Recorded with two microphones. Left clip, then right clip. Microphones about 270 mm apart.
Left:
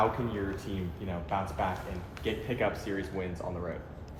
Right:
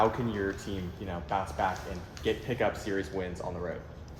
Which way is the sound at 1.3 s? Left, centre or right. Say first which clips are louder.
Right 2 dB; right.